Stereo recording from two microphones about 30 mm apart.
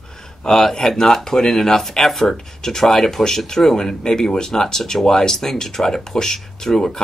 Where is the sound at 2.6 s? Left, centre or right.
Centre.